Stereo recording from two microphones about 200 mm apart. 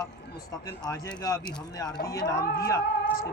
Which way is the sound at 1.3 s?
15° left (ahead or behind).